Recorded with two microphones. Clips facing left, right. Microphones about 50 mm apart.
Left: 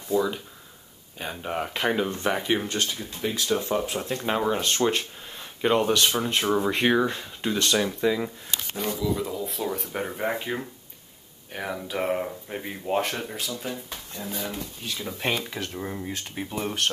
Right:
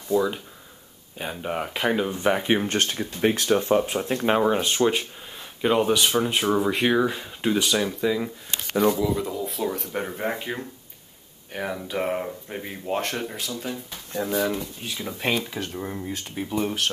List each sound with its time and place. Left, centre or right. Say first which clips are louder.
0.1 s speech: right 2 dB; centre
2.4 s speech: right 3 dB; right
2.7 s speech: right 4 dB; right
3.4 s speech: right 2 dB; right; by 7.7 s centre
7.7 s speech: even; centre
14.8 s speech: right 1 dB; centre